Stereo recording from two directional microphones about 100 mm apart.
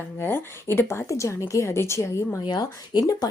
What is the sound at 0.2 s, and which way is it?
A woman's voice, 25° left (ahead or behind).